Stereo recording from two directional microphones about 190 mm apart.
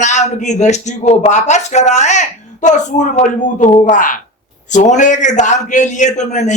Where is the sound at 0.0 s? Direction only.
40° left (ahead or behind).